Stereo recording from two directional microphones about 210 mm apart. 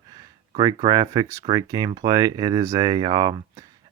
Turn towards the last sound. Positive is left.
turn(degrees=-20)  # may be behind; listen again after turning